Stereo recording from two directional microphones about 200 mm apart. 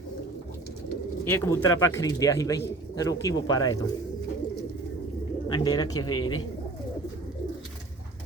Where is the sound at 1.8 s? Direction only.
15° left (ahead or behind).